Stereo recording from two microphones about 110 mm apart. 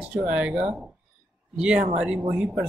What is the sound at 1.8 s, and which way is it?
Speech, 90° right.